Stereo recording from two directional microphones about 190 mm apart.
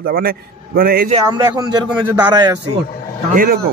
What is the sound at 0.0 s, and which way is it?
Speech, 50° right (ahead or behind).